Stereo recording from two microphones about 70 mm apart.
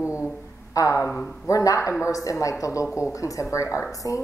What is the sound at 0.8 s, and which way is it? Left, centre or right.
A woman's voice, left.